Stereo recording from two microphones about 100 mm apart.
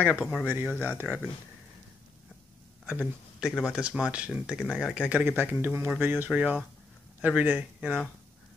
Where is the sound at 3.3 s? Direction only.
5° right (ahead or behind).